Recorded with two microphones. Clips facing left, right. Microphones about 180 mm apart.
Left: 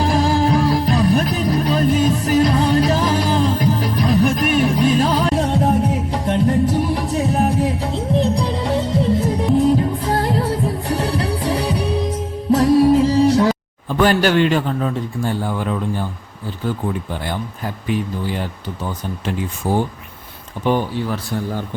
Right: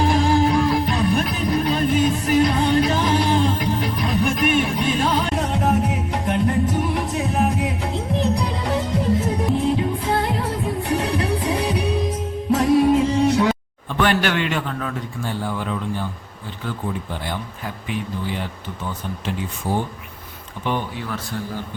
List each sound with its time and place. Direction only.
0.0 s music: 35° left (ahead or behind)
9.6 s music: 40° left (ahead or behind)
14.0 s a man's voice: 40° left (ahead or behind)
19.6 s speech: 45° left (ahead or behind)